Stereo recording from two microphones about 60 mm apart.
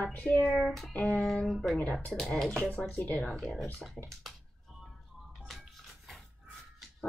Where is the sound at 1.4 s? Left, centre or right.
Centre.